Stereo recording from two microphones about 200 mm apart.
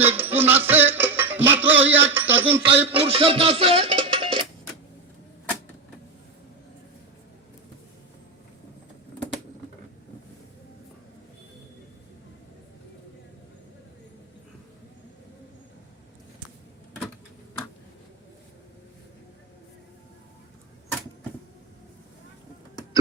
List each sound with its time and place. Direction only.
0.0 s music: 10° right (ahead or behind)
2.9 s music: 30° right (ahead or behind)